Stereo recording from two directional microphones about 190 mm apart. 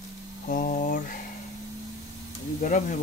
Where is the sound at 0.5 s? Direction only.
45° left (ahead or behind).